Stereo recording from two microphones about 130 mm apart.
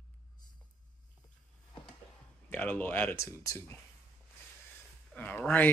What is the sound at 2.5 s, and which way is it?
Speech, 15° left (ahead or behind).